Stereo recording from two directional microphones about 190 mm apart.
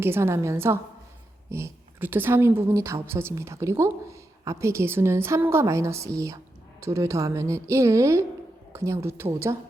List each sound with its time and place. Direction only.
0.0 s a woman's voice: 15° right (ahead or behind)